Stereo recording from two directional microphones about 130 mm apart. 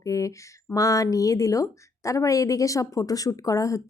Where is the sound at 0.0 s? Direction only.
25° left (ahead or behind).